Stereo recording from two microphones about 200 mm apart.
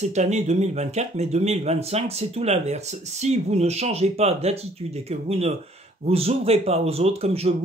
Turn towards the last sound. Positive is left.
turn(degrees=-30)  # may be behind; listen again after turning